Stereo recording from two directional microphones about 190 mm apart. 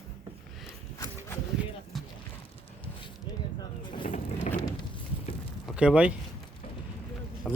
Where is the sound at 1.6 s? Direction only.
5° right (ahead or behind).